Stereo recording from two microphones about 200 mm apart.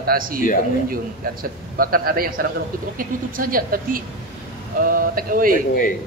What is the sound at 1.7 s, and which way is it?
A man's voice, 45° right (ahead or behind).